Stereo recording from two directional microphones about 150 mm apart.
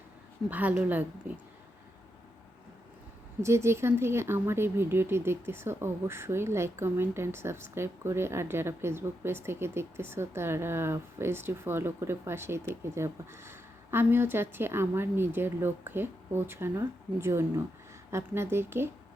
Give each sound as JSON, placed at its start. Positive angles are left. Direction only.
{"t": 0.5, "sound": "speech", "side_deg": -10}
{"t": 3.4, "sound": "speech", "side_deg": -20}